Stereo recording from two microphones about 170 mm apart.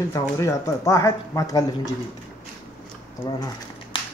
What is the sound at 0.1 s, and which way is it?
Speech, 20° left (ahead or behind).